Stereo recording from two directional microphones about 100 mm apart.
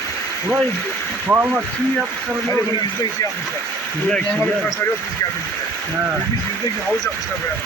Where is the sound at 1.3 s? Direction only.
20° right (ahead or behind).